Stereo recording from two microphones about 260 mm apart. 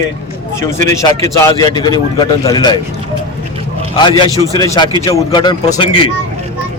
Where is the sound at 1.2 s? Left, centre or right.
Centre.